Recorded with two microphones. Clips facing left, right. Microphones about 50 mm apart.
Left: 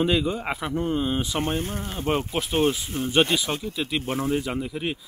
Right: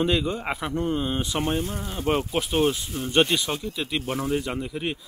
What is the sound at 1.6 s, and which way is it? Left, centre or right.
Speech, left.